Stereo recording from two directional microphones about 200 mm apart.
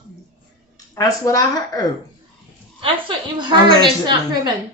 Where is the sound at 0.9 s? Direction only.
15° left (ahead or behind).